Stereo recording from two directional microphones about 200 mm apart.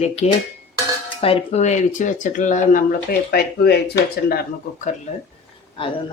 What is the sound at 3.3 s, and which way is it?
Speech, 50° left (ahead or behind).